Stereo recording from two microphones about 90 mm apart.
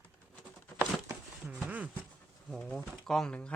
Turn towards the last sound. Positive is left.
turn(degrees=10)  # may be behind; listen again after turning